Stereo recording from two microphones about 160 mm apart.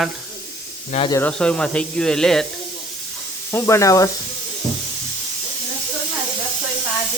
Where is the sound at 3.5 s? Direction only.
15° left (ahead or behind).